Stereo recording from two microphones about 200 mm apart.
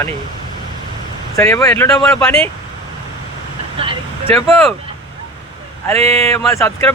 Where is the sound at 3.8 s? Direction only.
25° right (ahead or behind).